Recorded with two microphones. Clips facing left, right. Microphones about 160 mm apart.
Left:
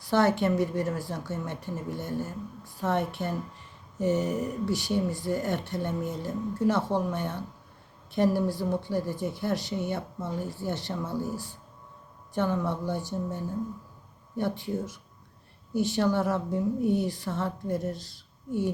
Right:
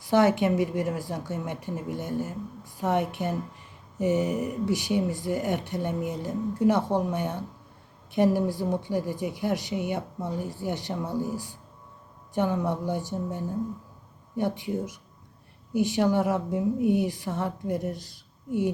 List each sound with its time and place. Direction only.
0.1 s speech: 15° right (ahead or behind)